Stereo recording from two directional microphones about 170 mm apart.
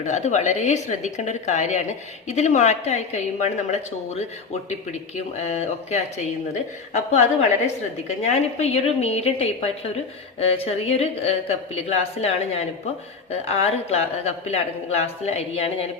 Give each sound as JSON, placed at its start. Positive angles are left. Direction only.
{"t": 0.0, "sound": "a woman's voice", "side_deg": 45}